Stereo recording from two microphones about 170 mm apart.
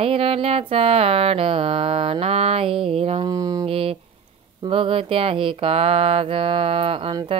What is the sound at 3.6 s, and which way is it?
Mantra, 35° right (ahead or behind).